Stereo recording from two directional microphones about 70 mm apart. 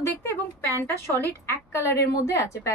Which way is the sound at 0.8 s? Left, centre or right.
Left.